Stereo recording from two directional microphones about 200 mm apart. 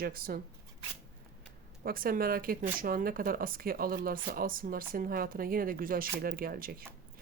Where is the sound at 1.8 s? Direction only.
45° right (ahead or behind).